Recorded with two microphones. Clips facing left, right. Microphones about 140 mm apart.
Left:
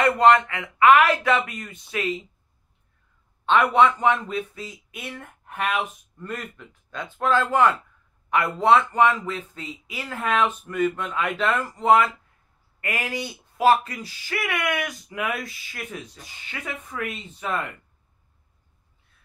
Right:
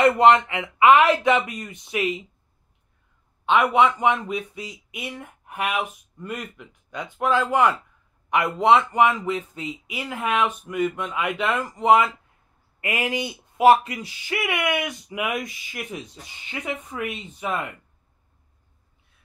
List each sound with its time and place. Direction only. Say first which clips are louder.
0.0 s speech: right 1 dB; 25° right (ahead or behind)
3.4 s speech: even; 10° right (ahead or behind)